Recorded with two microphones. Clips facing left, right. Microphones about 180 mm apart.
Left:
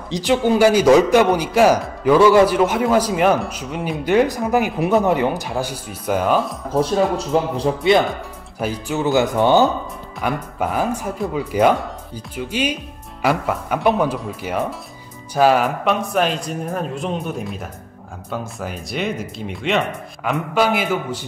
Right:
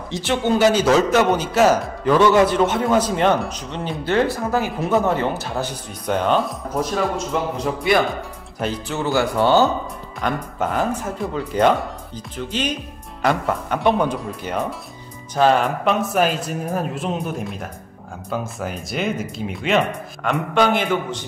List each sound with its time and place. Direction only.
0.1 s a man's voice: 15° left (ahead or behind)
6.7 s speech: 30° left (ahead or behind)
8.5 s a man's voice: 10° left (ahead or behind)